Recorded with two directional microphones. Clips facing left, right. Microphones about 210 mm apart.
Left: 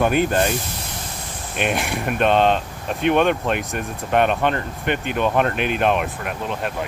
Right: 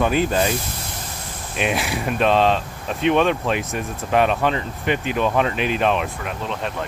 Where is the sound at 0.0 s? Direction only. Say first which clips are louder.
Left 1 dB; centre (ahead or behind).